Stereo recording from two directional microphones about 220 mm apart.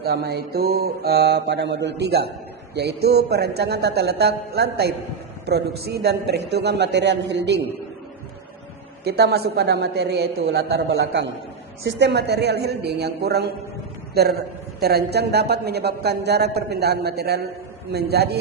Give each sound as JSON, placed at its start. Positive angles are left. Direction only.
{"t": 0.0, "sound": "a woman's voice", "side_deg": -45}
{"t": 9.0, "sound": "a woman's voice", "side_deg": -45}